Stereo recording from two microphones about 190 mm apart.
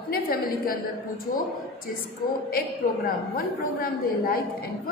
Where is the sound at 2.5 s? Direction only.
50° left (ahead or behind).